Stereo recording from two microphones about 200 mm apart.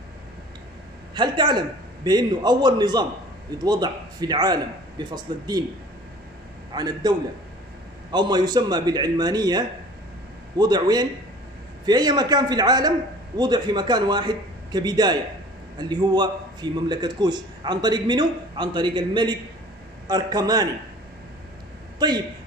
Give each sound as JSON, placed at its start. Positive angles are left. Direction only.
{"t": 1.1, "sound": "a man's voice", "side_deg": -20}
{"t": 6.7, "sound": "a man's voice", "side_deg": -20}
{"t": 8.1, "sound": "a man's voice", "side_deg": -20}
{"t": 21.9, "sound": "a man's voice", "side_deg": -20}